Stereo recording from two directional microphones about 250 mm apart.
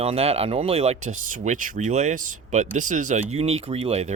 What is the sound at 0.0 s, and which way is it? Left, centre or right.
Speech, right.